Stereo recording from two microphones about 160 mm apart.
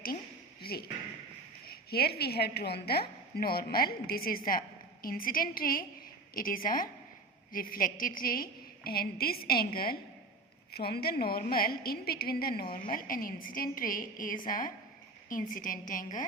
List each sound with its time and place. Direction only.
0.6 s a woman's voice: 75° left (ahead or behind)
12.7 s a woman's voice: 60° left (ahead or behind)